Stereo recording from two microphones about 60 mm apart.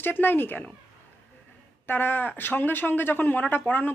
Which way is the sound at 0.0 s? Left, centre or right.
Left.